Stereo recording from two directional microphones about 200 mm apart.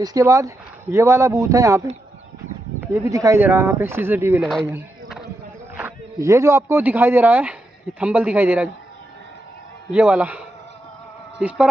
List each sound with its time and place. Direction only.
0.0 s speech: 15° right (ahead or behind)
2.8 s speech: 10° right (ahead or behind)
4.4 s speech: centre (ahead or behind)
5.8 s speech: 10° right (ahead or behind)
9.9 s speech: 5° right (ahead or behind)